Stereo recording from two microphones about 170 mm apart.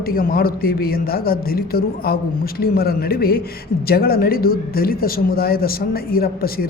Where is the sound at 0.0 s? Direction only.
60° left (ahead or behind).